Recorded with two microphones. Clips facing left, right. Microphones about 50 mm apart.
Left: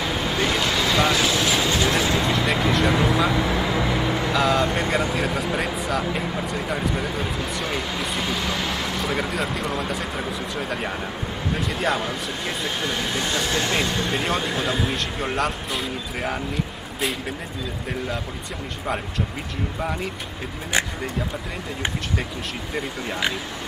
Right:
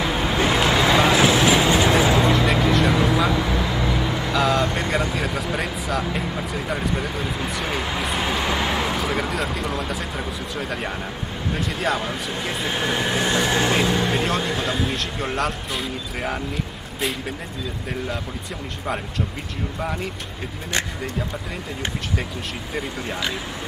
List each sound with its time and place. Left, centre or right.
0.0 s vehicle: centre
2.2 s vehicle: centre
8.2 s vehicle: right
8.9 s speech: centre
12.7 s speech: centre
13.7 s speech: centre
19.8 s speech: centre
22.8 s speech: centre